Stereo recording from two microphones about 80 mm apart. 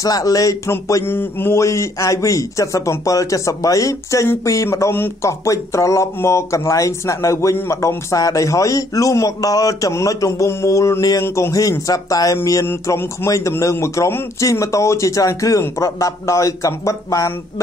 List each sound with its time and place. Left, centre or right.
0.0 s speech: left
1.0 s a man's voice: left
11.2 s a man's voice: left
11.9 s speech: left
12.8 s a man's voice: left